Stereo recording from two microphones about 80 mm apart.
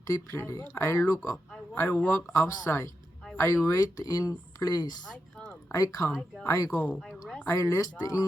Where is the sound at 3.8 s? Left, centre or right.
Left.